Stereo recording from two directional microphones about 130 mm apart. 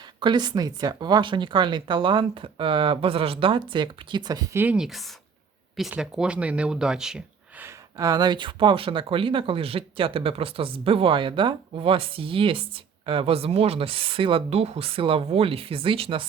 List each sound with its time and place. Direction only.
0.2 s speech: 35° right (ahead or behind)
4.5 s speech: 10° right (ahead or behind)
7.6 s speech: 25° right (ahead or behind); by 16.2 s 45° right (ahead or behind)